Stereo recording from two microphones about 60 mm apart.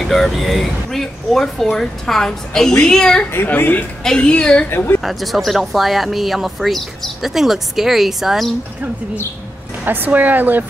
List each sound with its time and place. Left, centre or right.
0.0 s a woman's voice: centre
3.4 s a woman's voice: left
4.0 s a woman's voice: centre
4.6 s a woman's voice: left
5.0 s speech: centre
9.8 s a woman's voice: right